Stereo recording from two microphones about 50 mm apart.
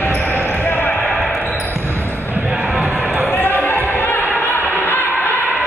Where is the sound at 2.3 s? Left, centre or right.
Right.